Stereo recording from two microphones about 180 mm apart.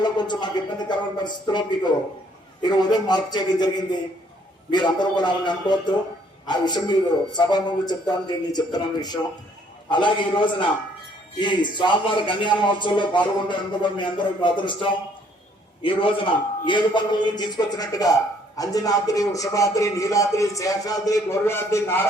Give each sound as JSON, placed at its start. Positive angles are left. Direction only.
{"t": 0.0, "sound": "a man's voice", "side_deg": 25}
{"t": 15.8, "sound": "a man's voice", "side_deg": 30}